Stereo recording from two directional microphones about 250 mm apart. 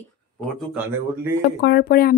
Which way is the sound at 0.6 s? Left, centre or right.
Centre.